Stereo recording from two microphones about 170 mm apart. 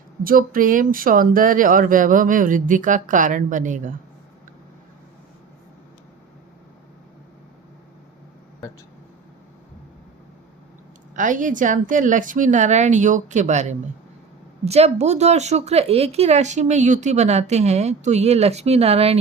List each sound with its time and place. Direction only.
0.3 s speech: 55° right (ahead or behind)
11.1 s speech: 50° right (ahead or behind)